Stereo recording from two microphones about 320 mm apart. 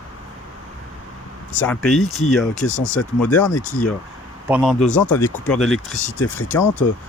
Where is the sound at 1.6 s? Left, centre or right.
Centre.